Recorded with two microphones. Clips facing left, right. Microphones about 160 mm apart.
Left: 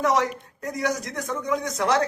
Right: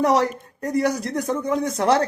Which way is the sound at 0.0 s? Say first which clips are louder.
Right 4 dB; 35° right (ahead or behind).